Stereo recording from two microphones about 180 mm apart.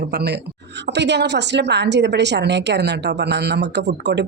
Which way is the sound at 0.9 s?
75° right (ahead or behind).